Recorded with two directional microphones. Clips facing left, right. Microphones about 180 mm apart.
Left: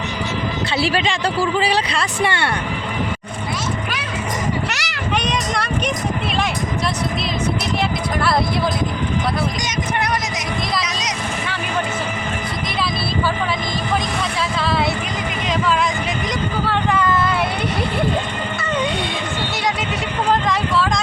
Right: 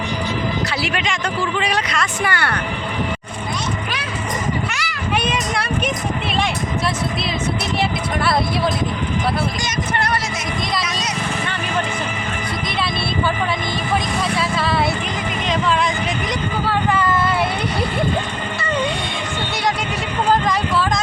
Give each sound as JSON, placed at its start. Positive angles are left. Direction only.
{"t": 0.8, "sound": "speech", "side_deg": 30}
{"t": 4.7, "sound": "a child's voice", "side_deg": 75}
{"t": 5.3, "sound": "speech", "side_deg": -5}
{"t": 7.8, "sound": "speech", "side_deg": 0}
{"t": 14.3, "sound": "vehicle", "side_deg": 0}
{"t": 16.6, "sound": "vehicle", "side_deg": 0}
{"t": 20.3, "sound": "a sound", "side_deg": 0}